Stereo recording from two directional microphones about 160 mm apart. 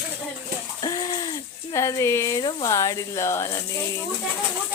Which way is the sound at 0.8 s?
25° left (ahead or behind).